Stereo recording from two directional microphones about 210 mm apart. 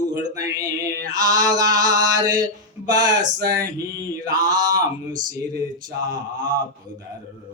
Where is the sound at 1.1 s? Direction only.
15° right (ahead or behind).